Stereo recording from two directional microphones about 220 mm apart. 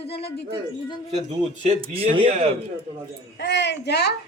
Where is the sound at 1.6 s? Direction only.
25° right (ahead or behind).